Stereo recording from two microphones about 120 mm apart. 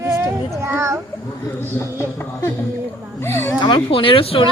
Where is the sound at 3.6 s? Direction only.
45° left (ahead or behind).